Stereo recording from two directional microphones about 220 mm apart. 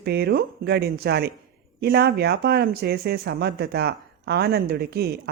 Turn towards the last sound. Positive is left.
turn(degrees=-45)  # may be behind; listen again after turning